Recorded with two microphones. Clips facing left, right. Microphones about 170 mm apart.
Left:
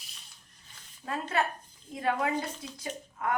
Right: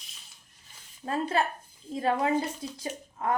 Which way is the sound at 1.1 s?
30° right (ahead or behind).